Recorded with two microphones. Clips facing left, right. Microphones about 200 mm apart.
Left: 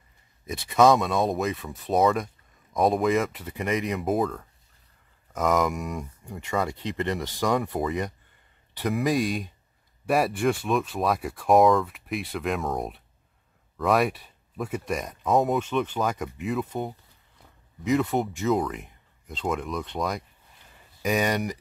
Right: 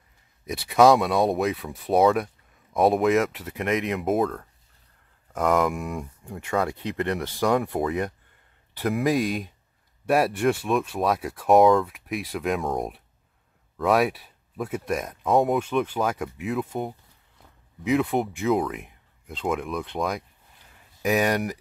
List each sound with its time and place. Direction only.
0.5 s speech: 5° right (ahead or behind)